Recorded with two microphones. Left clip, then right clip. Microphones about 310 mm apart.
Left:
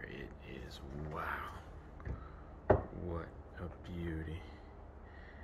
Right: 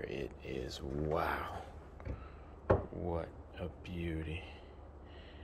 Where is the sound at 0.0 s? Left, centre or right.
Centre.